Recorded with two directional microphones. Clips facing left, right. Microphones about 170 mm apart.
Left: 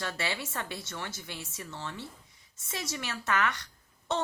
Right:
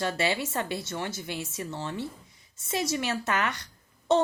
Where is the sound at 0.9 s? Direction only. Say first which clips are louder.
Right 7 dB; 15° right (ahead or behind).